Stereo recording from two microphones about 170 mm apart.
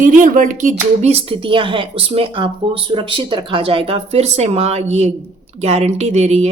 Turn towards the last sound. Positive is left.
turn(degrees=-40)  # may be behind; listen again after turning